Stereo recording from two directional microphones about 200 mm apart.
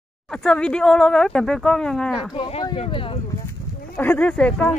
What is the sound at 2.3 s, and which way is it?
Speech, 25° left (ahead or behind).